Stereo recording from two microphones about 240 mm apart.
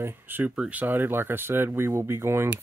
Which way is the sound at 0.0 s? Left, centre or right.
Centre.